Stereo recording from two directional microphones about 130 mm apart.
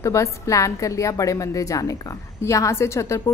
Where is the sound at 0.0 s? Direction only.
25° left (ahead or behind).